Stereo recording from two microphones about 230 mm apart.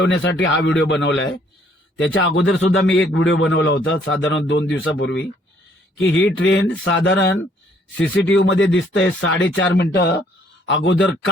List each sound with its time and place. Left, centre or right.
0.0 s a man's voice: left